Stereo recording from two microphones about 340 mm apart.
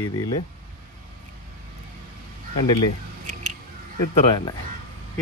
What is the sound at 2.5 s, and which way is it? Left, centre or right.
Speech, centre.